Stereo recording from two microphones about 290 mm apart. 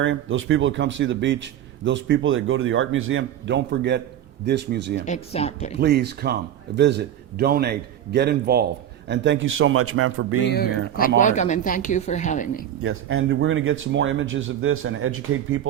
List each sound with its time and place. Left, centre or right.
0.0 s speech: right
5.0 s speech: left
5.8 s speech: right
10.4 s speech: left
12.8 s speech: right